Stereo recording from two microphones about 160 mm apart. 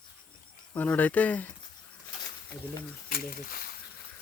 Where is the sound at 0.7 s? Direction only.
10° left (ahead or behind).